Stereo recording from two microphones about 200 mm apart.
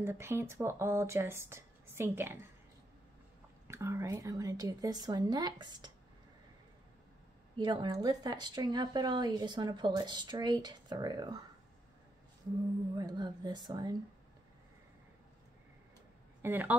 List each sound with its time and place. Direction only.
0.0 s speech: 15° right (ahead or behind)
3.6 s speech: 15° right (ahead or behind)
7.5 s speech: 20° right (ahead or behind)
12.9 s speech: 20° right (ahead or behind)
16.4 s speech: 10° right (ahead or behind)